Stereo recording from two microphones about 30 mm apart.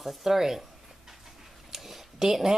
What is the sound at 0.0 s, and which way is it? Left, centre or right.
Speech, centre.